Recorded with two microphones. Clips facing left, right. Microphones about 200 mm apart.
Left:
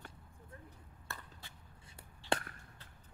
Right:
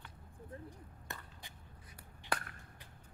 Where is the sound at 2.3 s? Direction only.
25° left (ahead or behind).